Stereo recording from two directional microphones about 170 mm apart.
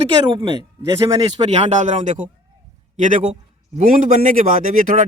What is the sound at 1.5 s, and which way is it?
A man's voice, 40° right (ahead or behind).